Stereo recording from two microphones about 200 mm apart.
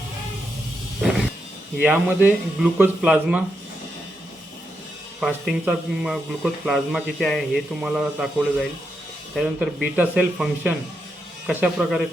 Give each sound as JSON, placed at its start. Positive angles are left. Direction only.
{"t": 1.8, "sound": "a man's voice", "side_deg": -5}
{"t": 5.2, "sound": "a man's voice", "side_deg": 0}